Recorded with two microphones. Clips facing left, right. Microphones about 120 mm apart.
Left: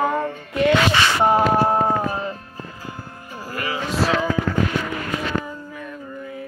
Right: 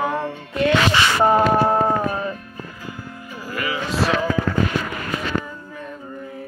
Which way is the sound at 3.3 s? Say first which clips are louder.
Right 1 dB; 40° left (ahead or behind).